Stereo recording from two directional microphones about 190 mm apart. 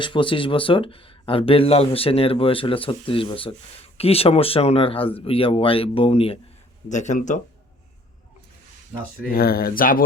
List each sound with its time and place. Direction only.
0.0 s speech: 25° left (ahead or behind)
9.3 s speech: 50° left (ahead or behind)